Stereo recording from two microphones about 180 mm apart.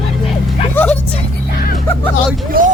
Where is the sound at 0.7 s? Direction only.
10° left (ahead or behind).